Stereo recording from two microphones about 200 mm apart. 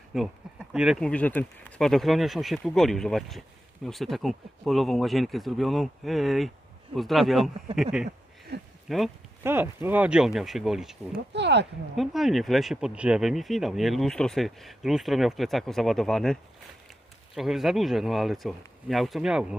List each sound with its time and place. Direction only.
0.1 s speech: centre (ahead or behind)
8.5 s speech: 55° right (ahead or behind)
8.8 s speech: centre (ahead or behind)
9.4 s speech: 10° right (ahead or behind)
11.3 s speech: 60° right (ahead or behind)
11.9 s speech: centre (ahead or behind)
17.4 s speech: centre (ahead or behind)